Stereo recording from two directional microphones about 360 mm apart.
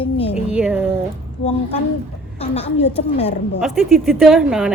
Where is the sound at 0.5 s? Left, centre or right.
Centre.